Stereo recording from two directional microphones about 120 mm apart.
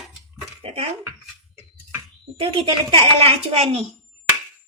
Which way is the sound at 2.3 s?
50° right (ahead or behind).